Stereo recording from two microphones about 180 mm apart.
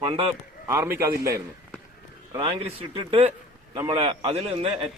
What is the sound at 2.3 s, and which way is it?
A man's voice, 25° right (ahead or behind).